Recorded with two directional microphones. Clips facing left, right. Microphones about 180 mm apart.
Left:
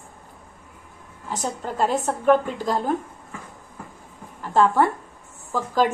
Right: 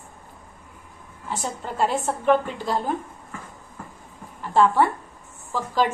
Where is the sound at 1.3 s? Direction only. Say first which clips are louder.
Left 2 dB; 40° left (ahead or behind).